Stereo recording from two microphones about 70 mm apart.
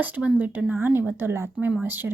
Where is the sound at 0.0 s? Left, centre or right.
Centre.